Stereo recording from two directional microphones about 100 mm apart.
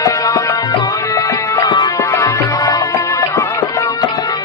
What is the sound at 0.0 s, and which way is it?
Music, 35° left (ahead or behind).